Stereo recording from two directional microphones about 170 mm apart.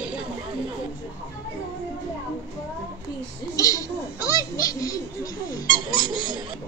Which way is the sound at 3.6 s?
20° left (ahead or behind).